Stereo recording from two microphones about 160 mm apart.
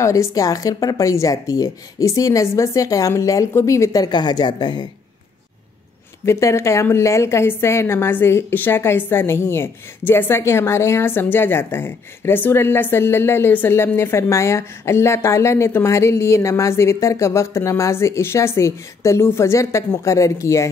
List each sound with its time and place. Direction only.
0.0 s a woman's voice: 20° left (ahead or behind)
6.2 s a woman's voice: 15° left (ahead or behind)